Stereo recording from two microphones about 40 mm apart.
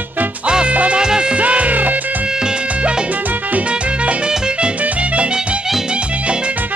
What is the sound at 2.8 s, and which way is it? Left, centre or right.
Music, right.